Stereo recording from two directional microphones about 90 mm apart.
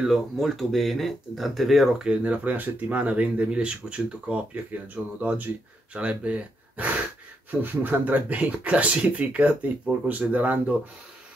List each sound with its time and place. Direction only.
0.0 s speech: centre (ahead or behind)